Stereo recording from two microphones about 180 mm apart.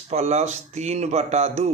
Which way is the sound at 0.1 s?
35° right (ahead or behind).